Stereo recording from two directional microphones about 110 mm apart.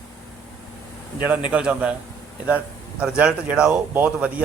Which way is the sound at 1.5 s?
10° right (ahead or behind).